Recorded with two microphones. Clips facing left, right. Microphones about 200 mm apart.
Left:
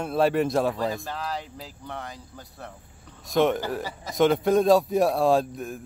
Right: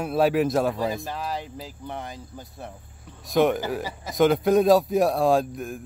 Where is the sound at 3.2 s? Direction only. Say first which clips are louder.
Right 1 dB; centre (ahead or behind).